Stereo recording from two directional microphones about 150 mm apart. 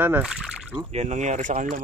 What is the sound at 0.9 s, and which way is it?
Speech, 50° right (ahead or behind).